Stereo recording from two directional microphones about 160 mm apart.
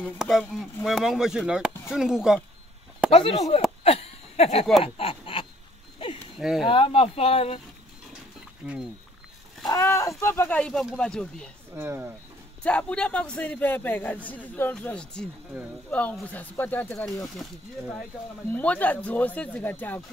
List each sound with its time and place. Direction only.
0.2 s speech: centre (ahead or behind)
3.1 s speech: 35° left (ahead or behind)
3.8 s a sound: 40° left (ahead or behind)
4.8 s duck: 35° left (ahead or behind)
5.9 s a sound: 35° left (ahead or behind)
6.3 s speech: centre (ahead or behind)
6.6 s speech: 35° left (ahead or behind)
8.6 s speech: 5° right (ahead or behind)
9.7 s a man's voice: 20° left (ahead or behind)
11.7 s speech: 15° right (ahead or behind)
12.6 s a man's voice: 5° left (ahead or behind)
18.5 s a man's voice: 10° left (ahead or behind)